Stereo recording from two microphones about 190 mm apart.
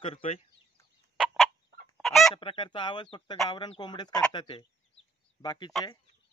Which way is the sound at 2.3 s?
25° left (ahead or behind).